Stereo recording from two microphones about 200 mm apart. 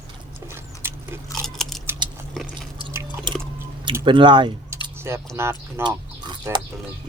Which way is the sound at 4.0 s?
25° right (ahead or behind).